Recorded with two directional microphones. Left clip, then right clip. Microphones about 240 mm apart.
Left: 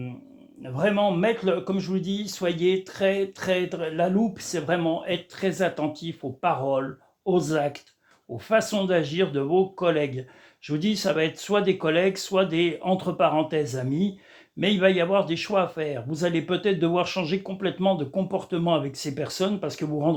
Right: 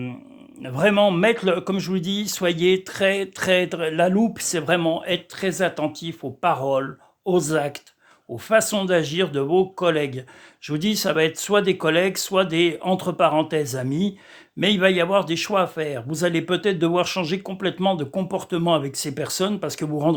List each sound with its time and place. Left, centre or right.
0.6 s a man's voice: right